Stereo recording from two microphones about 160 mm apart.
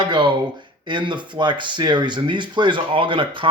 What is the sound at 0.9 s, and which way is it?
Speech, 30° right (ahead or behind).